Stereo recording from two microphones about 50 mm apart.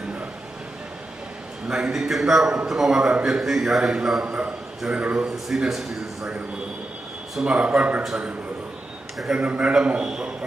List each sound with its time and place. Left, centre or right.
1.6 s speech: centre
1.9 s a man's voice: centre
4.9 s speech: right
5.5 s a man's voice: centre
7.4 s speech: centre
9.3 s a man's voice: right